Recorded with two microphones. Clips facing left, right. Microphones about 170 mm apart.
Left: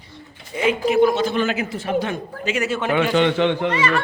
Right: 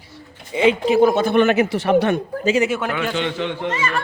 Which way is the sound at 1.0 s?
55° right (ahead or behind).